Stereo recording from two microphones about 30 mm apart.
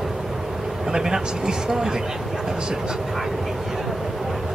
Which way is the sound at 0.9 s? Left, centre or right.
Centre.